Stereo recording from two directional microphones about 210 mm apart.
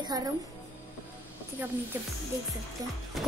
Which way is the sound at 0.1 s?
15° right (ahead or behind).